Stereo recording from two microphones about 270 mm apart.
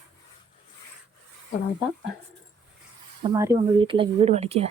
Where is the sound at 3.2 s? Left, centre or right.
Centre.